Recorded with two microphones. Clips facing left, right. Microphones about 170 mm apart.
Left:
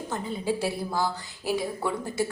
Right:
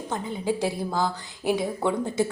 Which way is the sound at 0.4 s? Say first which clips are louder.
Right 2 dB; 15° right (ahead or behind).